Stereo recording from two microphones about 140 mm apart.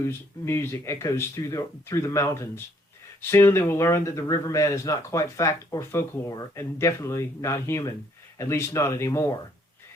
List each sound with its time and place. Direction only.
0.0 s speech: 20° left (ahead or behind)